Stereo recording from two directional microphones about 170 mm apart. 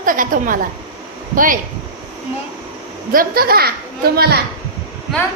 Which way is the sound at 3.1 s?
60° right (ahead or behind).